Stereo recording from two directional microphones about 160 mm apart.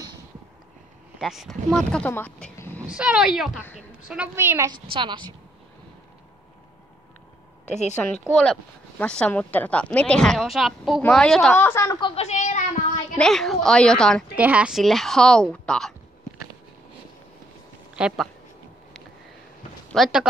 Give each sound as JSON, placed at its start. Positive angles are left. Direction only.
{"t": 1.2, "sound": "speech", "side_deg": 0}
{"t": 2.9, "sound": "a woman's voice", "side_deg": -5}
{"t": 4.9, "sound": "a woman's voice", "side_deg": -30}
{"t": 7.6, "sound": "a woman's voice", "side_deg": 45}
{"t": 8.0, "sound": "speech", "side_deg": 5}
{"t": 11.5, "sound": "speech", "side_deg": 15}
{"t": 12.0, "sound": "speech", "side_deg": 40}
{"t": 13.2, "sound": "speech", "side_deg": 0}
{"t": 14.3, "sound": "speech", "side_deg": -10}
{"t": 17.9, "sound": "speech", "side_deg": -5}
{"t": 19.9, "sound": "speech", "side_deg": 0}